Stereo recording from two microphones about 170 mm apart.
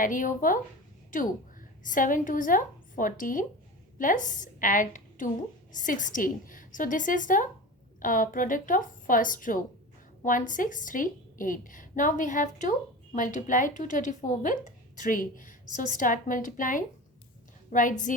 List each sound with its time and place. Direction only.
0.0 s a woman's voice: 50° left (ahead or behind)